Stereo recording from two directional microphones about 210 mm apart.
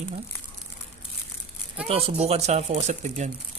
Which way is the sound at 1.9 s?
30° right (ahead or behind).